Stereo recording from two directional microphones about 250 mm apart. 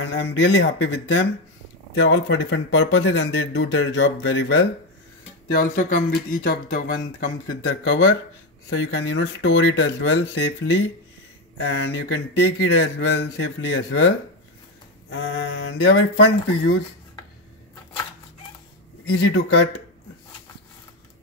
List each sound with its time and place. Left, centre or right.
0.0 s speech: left
5.5 s speech: left
19.0 s speech: left